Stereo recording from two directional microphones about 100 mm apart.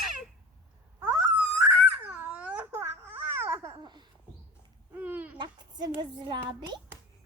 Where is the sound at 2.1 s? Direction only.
15° right (ahead or behind).